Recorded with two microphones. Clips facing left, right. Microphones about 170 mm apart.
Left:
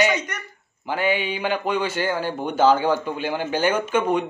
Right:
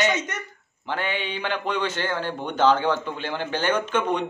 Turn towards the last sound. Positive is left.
turn(degrees=10)  # may be behind; listen again after turning